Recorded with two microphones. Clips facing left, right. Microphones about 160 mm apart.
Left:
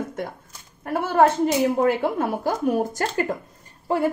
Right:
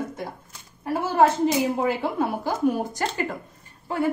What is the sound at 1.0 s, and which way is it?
Speech, 55° left (ahead or behind).